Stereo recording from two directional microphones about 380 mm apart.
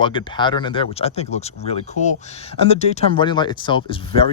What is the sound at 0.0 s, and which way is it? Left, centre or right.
Speech, centre.